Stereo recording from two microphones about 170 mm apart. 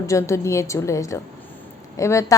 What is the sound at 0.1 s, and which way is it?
A woman's voice, 15° left (ahead or behind).